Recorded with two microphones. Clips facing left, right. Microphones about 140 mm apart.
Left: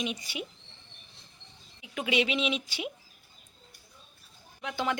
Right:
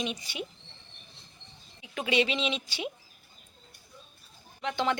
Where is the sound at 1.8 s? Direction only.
5° left (ahead or behind).